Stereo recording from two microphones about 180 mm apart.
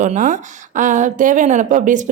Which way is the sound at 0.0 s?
45° right (ahead or behind).